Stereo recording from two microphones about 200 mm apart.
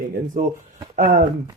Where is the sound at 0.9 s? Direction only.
40° right (ahead or behind).